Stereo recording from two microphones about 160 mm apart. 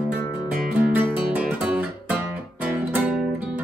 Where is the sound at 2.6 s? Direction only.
5° right (ahead or behind).